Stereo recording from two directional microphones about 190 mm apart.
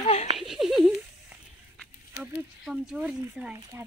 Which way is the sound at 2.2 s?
55° left (ahead or behind).